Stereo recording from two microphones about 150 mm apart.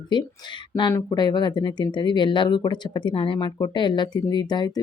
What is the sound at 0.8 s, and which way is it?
Speech, 25° left (ahead or behind).